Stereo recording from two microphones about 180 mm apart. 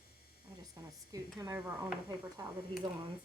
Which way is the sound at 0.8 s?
20° right (ahead or behind).